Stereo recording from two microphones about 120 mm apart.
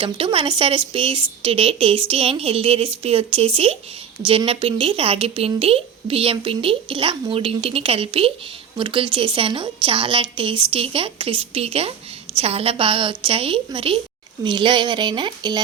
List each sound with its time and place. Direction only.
0.0 s speech: 45° right (ahead or behind)